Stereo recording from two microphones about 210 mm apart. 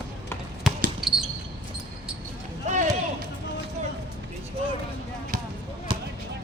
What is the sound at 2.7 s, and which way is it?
Run, 35° right (ahead or behind).